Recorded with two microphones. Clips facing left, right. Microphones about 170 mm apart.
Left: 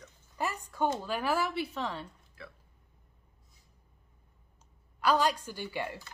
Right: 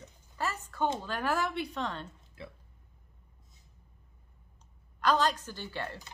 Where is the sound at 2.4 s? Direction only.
25° right (ahead or behind).